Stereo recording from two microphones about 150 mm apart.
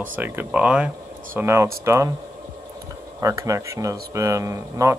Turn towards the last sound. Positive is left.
turn(degrees=-20)  # may be behind; listen again after turning